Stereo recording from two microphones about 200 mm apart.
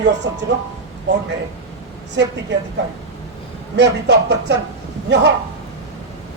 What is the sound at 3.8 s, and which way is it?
Speech, 60° right (ahead or behind).